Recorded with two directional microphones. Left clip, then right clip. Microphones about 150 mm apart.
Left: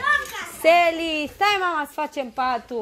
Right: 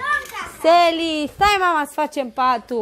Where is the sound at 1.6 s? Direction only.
45° right (ahead or behind).